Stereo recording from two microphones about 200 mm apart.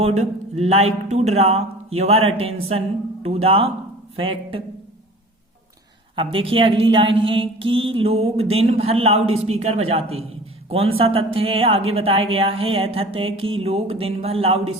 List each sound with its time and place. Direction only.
0.0 s a woman's voice: 30° right (ahead or behind)
6.1 s a woman's voice: 25° right (ahead or behind)